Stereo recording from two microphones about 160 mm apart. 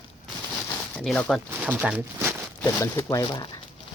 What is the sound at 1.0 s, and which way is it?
Speech, 5° left (ahead or behind).